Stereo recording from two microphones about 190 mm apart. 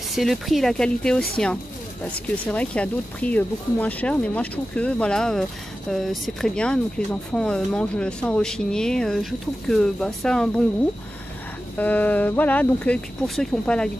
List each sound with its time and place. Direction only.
0.1 s speech: centre (ahead or behind)
11.8 s speech: 10° left (ahead or behind)